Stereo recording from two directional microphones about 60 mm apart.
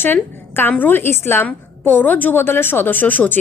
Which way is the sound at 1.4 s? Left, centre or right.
Left.